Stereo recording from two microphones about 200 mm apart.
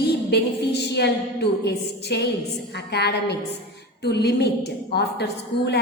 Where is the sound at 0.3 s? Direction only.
55° left (ahead or behind).